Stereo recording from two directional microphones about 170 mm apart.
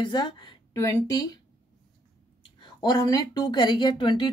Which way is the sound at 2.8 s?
25° left (ahead or behind).